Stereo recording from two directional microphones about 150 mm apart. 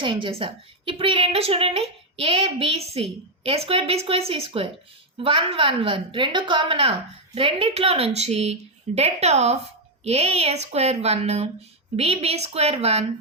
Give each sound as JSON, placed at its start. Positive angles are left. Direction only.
{"t": 0.0, "sound": "a woman's voice", "side_deg": -35}